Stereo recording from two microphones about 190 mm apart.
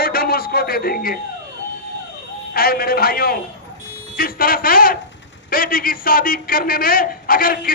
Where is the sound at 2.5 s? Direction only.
50° left (ahead or behind).